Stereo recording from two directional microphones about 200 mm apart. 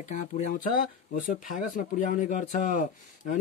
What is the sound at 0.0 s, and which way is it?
Speech, 40° left (ahead or behind).